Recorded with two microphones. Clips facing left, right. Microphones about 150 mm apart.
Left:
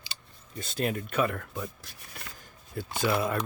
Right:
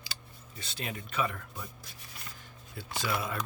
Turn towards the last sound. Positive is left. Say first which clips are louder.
# left 7 dB
turn(degrees=50)  # may be behind; listen again after turning